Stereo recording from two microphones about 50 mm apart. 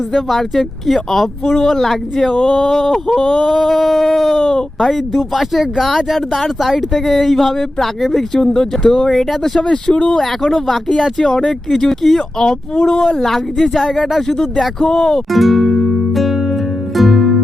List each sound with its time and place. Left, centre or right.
0.1 s speech: centre
4.9 s speech: centre
9.6 s speech: centre
12.5 s speech: centre
15.3 s speech: centre
16.1 s music: centre